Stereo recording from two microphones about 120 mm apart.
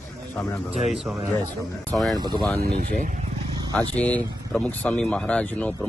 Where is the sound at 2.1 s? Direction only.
35° right (ahead or behind).